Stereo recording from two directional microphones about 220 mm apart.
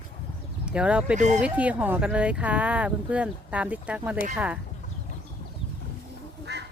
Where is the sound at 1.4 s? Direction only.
5° right (ahead or behind).